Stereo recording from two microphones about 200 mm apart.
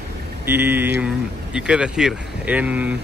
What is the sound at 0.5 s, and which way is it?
Speech, 10° right (ahead or behind).